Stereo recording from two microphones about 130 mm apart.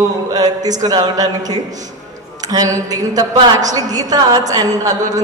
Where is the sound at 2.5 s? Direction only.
30° right (ahead or behind).